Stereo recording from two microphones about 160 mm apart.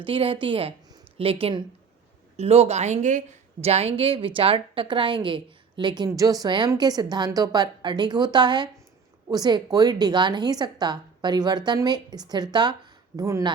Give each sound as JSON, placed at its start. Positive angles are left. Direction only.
{"t": 0.0, "sound": "a woman's voice", "side_deg": -35}